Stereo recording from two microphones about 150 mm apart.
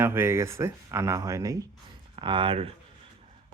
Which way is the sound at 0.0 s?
15° right (ahead or behind).